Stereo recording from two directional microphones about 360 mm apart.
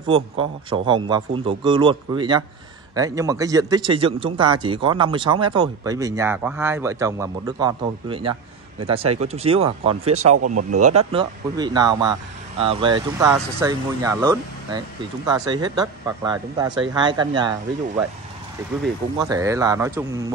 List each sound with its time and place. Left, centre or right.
0.0 s a man's voice: centre
10.3 s speech: right
11.0 s a man's voice: centre
19.1 s a man's voice: centre